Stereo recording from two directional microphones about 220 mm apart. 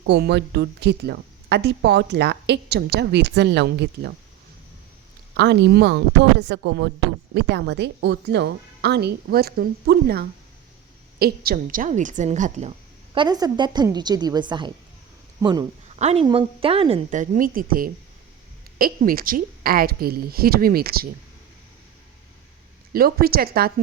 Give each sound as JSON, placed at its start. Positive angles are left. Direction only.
{"t": 0.0, "sound": "speech", "side_deg": -50}
{"t": 5.4, "sound": "a woman's voice", "side_deg": -50}
{"t": 13.1, "sound": "a woman's voice", "side_deg": -20}
{"t": 16.0, "sound": "a woman's voice", "side_deg": -30}
{"t": 22.9, "sound": "speech", "side_deg": -45}